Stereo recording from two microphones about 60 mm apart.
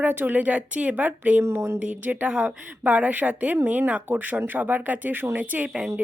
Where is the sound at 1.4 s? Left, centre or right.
Right.